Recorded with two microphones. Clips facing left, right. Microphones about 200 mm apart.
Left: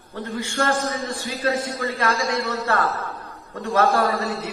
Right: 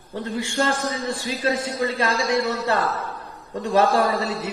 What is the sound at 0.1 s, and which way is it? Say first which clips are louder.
A man's voice: right 2 dB; 15° right (ahead or behind).